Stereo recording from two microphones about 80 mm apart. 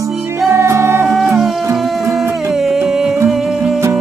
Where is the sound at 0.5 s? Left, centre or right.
Right.